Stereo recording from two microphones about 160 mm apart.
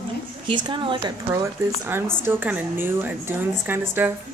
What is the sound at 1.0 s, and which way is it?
A woman's voice, 20° right (ahead or behind).